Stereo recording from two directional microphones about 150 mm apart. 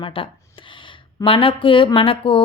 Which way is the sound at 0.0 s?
35° left (ahead or behind).